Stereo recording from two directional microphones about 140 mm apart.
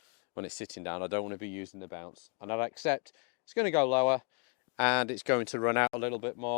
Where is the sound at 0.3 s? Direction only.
20° left (ahead or behind).